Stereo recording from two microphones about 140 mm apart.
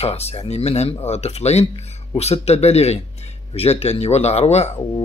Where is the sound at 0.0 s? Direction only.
50° left (ahead or behind).